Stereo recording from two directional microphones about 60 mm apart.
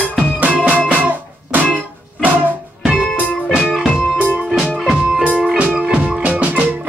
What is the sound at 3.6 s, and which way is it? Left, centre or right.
Music, centre.